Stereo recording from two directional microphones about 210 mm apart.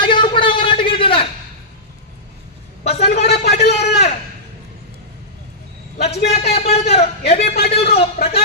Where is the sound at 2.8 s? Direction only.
30° left (ahead or behind).